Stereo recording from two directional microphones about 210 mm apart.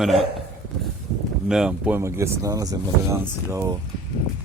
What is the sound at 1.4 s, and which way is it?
Speech, 5° right (ahead or behind).